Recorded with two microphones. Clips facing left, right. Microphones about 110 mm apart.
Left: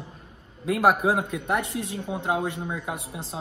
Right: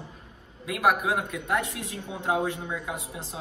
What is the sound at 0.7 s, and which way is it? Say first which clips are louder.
Speech: left 3 dB; 30° left (ahead or behind).